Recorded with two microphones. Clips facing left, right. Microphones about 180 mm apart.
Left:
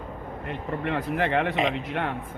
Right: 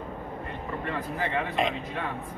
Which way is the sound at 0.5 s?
70° left (ahead or behind).